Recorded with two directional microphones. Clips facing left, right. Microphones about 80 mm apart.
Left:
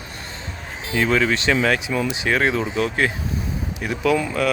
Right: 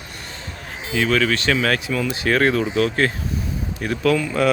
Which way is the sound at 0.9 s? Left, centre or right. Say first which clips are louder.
Even; centre.